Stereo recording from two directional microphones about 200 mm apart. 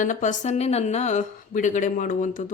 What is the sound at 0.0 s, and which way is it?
A woman's voice, 40° left (ahead or behind).